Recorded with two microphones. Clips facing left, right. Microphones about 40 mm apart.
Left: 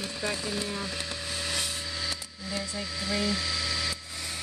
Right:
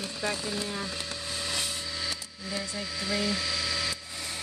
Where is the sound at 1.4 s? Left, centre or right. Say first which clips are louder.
Even; centre.